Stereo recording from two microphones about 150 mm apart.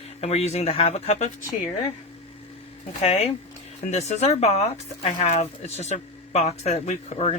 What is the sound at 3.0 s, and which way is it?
Speech, 45° left (ahead or behind).